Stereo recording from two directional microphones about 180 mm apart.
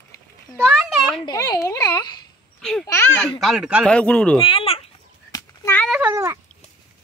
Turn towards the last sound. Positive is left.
turn(degrees=-15)  # may be behind; listen again after turning